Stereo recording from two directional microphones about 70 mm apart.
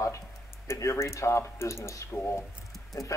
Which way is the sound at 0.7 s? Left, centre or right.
Left.